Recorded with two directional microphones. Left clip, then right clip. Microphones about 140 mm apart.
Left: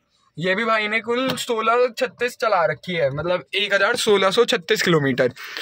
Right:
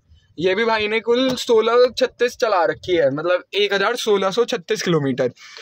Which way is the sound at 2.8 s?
90° right.